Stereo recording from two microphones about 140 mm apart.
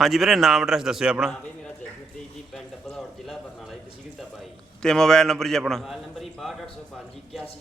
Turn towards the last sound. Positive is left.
turn(degrees=0)  # may be behind; listen again after turning